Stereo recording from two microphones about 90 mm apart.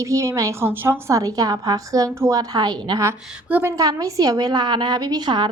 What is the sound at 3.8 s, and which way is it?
A woman's voice, 40° right (ahead or behind).